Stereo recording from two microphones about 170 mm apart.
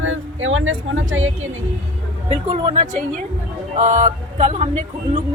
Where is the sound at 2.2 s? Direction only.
35° right (ahead or behind).